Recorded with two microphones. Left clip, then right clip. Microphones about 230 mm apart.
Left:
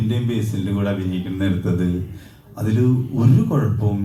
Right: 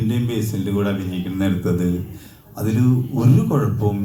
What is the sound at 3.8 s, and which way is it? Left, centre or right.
Speech, right.